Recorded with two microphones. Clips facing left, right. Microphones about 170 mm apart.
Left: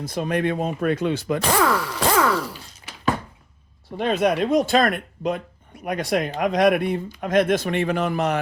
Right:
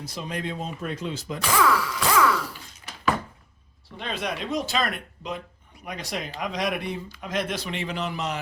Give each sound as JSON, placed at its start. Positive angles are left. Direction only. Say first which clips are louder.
{"t": 0.0, "sound": "speech", "louder": "left 9 dB", "side_deg": 55}
{"t": 1.4, "sound": "speech", "louder": "right 1 dB", "side_deg": 45}
{"t": 3.9, "sound": "speech", "louder": "left 11 dB", "side_deg": 50}